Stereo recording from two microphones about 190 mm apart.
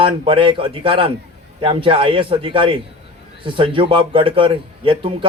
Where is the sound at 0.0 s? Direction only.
25° right (ahead or behind).